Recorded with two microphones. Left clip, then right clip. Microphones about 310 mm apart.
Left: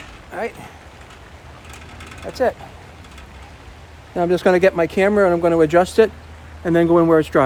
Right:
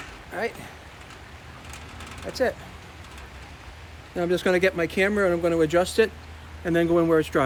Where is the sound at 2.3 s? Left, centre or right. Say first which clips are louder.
Left 4 dB; centre.